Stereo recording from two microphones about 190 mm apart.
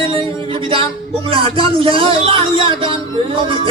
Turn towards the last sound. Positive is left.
turn(degrees=-30)  # may be behind; listen again after turning